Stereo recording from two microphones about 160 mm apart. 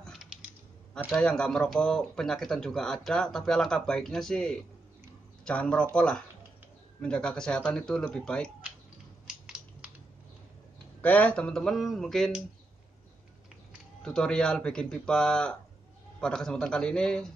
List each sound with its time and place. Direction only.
0.0 s typing: centre (ahead or behind)
1.1 s speech: 5° left (ahead or behind)
9.3 s crushing: 5° right (ahead or behind)
11.0 s speech: 10° left (ahead or behind)
14.0 s speech: 5° left (ahead or behind)